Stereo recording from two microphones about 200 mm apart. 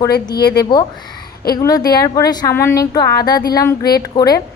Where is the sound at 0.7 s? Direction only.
20° left (ahead or behind).